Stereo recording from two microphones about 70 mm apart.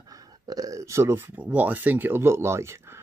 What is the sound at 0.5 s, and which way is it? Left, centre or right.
Speech, right.